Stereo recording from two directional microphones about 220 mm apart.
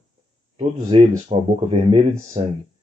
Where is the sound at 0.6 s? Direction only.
30° right (ahead or behind).